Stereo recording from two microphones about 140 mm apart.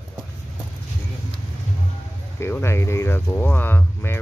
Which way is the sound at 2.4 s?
15° left (ahead or behind).